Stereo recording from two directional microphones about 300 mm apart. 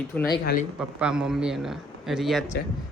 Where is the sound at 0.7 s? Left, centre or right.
Centre.